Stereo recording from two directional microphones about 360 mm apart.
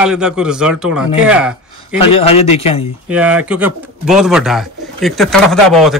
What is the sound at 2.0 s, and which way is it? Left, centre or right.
Speech, centre.